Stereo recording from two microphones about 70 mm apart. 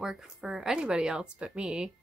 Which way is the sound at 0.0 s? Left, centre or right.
Centre.